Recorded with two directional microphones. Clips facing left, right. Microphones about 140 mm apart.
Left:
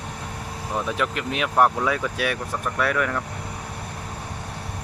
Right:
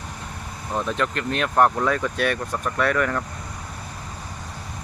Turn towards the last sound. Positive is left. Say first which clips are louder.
# right 2 dB
turn(degrees=5)  # may be behind; listen again after turning